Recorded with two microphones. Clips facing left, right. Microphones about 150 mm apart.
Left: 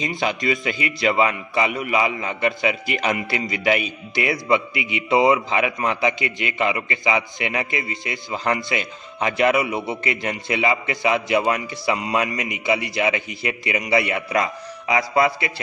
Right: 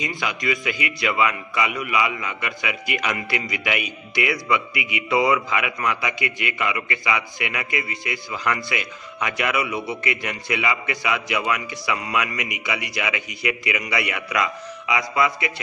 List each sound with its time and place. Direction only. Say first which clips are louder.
0.0 s a man's voice: left 4 dB; 30° left (ahead or behind)